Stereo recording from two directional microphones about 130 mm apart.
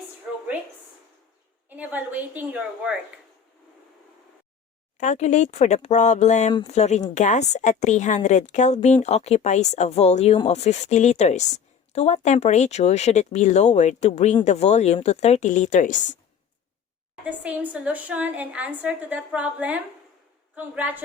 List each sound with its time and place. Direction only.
1.7 s a woman's voice: 15° right (ahead or behind)
4.9 s a woman's voice: 65° left (ahead or behind)
17.2 s a woman's voice: 10° right (ahead or behind)